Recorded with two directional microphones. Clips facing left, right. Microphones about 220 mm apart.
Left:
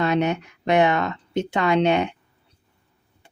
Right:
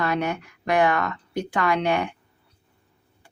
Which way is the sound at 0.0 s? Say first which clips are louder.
Left 4 dB; 20° left (ahead or behind).